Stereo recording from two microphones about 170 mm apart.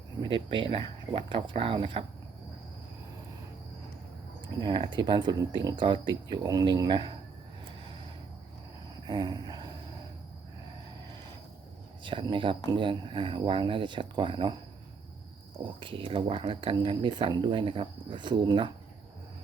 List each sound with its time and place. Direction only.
0.2 s speech: 30° right (ahead or behind)
4.6 s speech: 25° right (ahead or behind)
9.0 s a sound: 25° right (ahead or behind)
12.0 s speech: 30° right (ahead or behind)
15.6 s speech: 30° right (ahead or behind)